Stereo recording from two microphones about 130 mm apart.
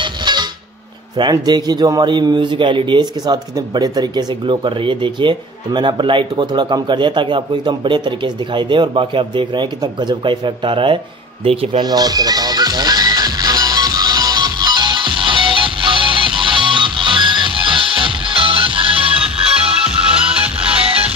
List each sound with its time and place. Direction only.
0.0 s a sound: 35° right (ahead or behind)
1.1 s a man's voice: 35° right (ahead or behind)
11.8 s music: 30° right (ahead or behind)
20.3 s music: 10° right (ahead or behind)